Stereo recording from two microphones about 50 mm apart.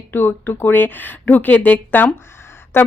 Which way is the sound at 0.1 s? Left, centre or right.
Left.